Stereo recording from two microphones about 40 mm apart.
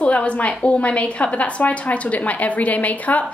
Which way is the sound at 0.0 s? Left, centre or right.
Left.